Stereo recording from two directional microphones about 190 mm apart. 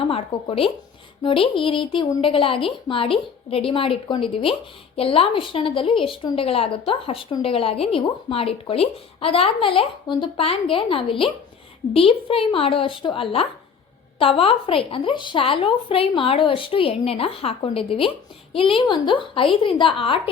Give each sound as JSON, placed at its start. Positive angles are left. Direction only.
{"t": 0.1, "sound": "a woman's voice", "side_deg": 30}